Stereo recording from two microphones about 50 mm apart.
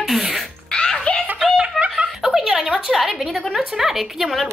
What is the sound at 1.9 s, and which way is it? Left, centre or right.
A woman's voice, centre.